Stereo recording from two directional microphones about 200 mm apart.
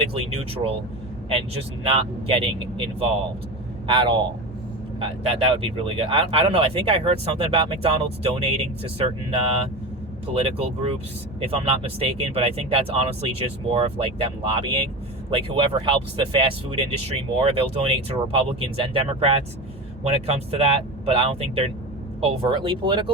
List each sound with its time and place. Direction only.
0.1 s speech: 30° right (ahead or behind)
10.4 s speech: 30° right (ahead or behind)